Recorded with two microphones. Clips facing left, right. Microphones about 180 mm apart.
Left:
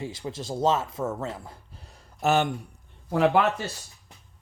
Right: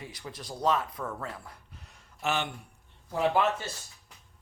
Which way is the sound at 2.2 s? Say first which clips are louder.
Left 8 dB; 45° left (ahead or behind).